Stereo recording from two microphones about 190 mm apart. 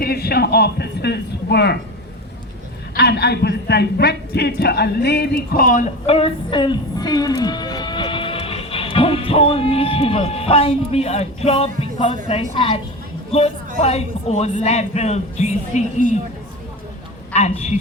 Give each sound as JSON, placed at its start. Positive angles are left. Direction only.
{"t": 0.0, "sound": "a man's voice", "side_deg": 55}
{"t": 2.9, "sound": "speech", "side_deg": 60}
{"t": 17.3, "sound": "a man's voice", "side_deg": 35}